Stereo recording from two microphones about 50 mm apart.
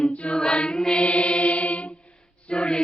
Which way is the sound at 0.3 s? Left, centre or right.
Centre.